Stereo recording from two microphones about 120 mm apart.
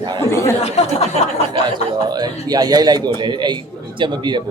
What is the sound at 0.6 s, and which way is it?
Speech, 60° left (ahead or behind).